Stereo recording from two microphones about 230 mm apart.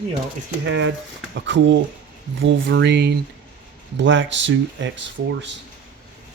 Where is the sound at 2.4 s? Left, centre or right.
Right.